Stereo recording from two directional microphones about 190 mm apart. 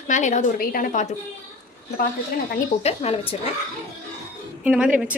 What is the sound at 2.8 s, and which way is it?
Speech, 35° left (ahead or behind).